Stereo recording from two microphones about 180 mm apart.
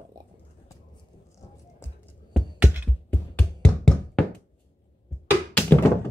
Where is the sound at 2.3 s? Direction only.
5° right (ahead or behind).